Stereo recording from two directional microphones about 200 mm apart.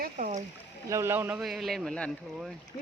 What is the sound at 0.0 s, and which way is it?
Splash, 40° right (ahead or behind).